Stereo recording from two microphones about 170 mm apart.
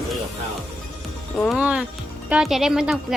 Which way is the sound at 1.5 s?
5° right (ahead or behind).